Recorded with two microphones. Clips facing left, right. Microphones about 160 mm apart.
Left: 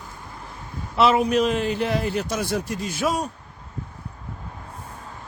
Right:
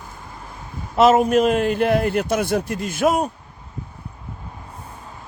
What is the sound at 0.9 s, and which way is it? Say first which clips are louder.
A man's voice: right 4 dB; 45° right (ahead or behind).